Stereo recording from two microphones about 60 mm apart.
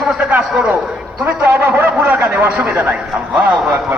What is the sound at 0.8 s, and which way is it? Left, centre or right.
Speech, right.